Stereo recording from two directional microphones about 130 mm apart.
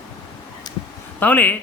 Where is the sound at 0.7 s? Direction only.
30° left (ahead or behind).